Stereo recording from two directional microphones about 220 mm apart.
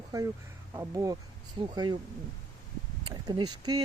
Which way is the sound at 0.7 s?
15° right (ahead or behind).